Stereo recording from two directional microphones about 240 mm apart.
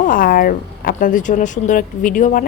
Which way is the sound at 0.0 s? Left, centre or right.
Left.